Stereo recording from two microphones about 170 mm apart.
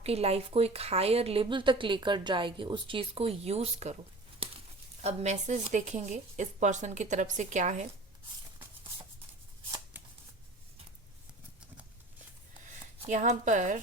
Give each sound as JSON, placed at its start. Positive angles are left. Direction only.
{"t": 0.0, "sound": "a woman's voice", "side_deg": -35}
{"t": 4.4, "sound": "a sound", "side_deg": -35}
{"t": 5.0, "sound": "speech", "side_deg": -40}
{"t": 13.1, "sound": "speech", "side_deg": -45}